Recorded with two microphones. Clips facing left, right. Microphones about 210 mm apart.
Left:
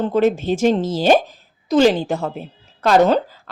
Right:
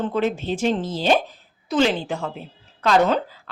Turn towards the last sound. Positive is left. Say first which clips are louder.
# left 4 dB
turn(degrees=40)  # may be behind; listen again after turning